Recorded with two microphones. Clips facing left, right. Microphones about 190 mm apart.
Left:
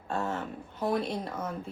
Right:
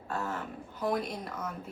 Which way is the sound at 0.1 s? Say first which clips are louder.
Left 3 dB; 25° left (ahead or behind).